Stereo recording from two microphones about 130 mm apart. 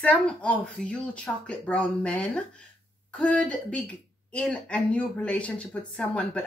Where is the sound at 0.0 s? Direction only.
10° left (ahead or behind).